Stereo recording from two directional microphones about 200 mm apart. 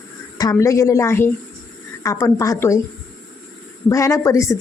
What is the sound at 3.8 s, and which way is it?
Speech, 15° left (ahead or behind).